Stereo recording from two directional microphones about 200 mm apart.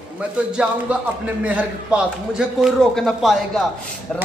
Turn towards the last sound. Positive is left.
turn(degrees=0)  # may be behind; listen again after turning